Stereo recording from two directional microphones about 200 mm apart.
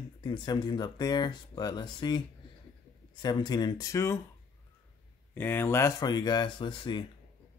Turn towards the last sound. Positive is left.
turn(degrees=25)  # may be behind; listen again after turning